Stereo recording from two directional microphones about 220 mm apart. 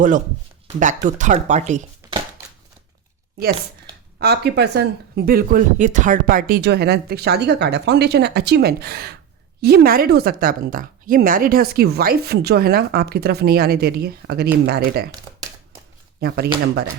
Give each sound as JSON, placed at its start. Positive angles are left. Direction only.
{"t": 1.0, "sound": "speech", "side_deg": -35}
{"t": 2.0, "sound": "chopping", "side_deg": -10}
{"t": 4.2, "sound": "speech", "side_deg": -50}
{"t": 16.2, "sound": "speech", "side_deg": -45}